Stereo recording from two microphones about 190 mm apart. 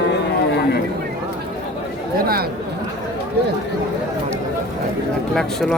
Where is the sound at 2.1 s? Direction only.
50° right (ahead or behind).